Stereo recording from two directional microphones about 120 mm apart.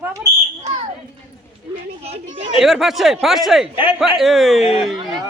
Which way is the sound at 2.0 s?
60° right (ahead or behind).